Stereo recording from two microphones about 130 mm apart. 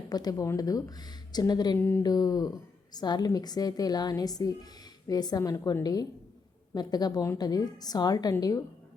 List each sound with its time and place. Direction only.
0.1 s a woman's voice: 30° left (ahead or behind)